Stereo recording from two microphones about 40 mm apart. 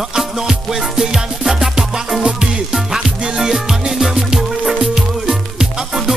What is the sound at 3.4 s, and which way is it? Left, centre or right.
Music, centre.